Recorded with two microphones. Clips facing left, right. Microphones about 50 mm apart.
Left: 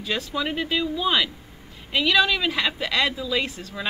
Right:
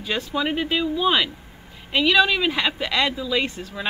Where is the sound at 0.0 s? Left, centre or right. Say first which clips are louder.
Right 2 dB; centre.